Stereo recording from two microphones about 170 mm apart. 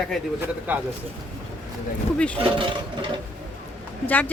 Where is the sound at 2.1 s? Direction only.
5° left (ahead or behind).